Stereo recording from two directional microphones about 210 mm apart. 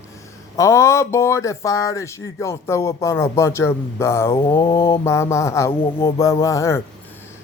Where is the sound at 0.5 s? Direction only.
15° left (ahead or behind).